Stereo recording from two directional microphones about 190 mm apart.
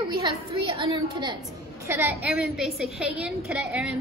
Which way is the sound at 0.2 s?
25° right (ahead or behind).